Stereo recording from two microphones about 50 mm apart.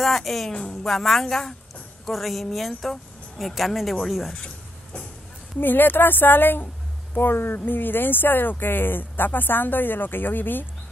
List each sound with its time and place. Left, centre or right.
0.0 s a woman's voice: centre
0.5 s a woman's voice: centre
0.8 s a woman's voice: centre
5.6 s speech: left